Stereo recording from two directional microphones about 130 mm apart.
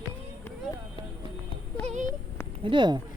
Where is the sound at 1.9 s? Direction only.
70° right (ahead or behind).